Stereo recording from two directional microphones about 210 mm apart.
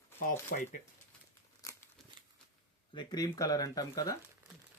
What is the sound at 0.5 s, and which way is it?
Speech, 40° left (ahead or behind).